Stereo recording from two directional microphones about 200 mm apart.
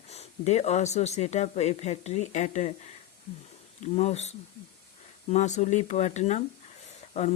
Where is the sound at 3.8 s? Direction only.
35° left (ahead or behind).